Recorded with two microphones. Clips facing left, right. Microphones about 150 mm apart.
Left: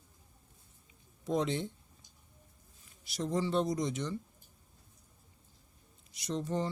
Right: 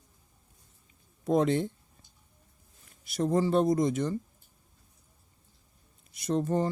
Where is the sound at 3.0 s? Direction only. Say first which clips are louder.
Right 7 dB; 55° right (ahead or behind).